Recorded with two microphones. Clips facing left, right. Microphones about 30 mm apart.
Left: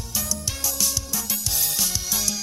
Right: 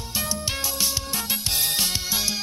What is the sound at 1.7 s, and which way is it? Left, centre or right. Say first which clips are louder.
Music: right 2 dB; right.